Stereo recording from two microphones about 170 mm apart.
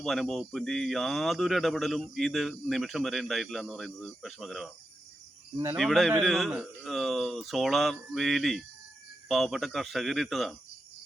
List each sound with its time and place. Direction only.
0.0 s speech: centre (ahead or behind)
5.7 s speech: centre (ahead or behind)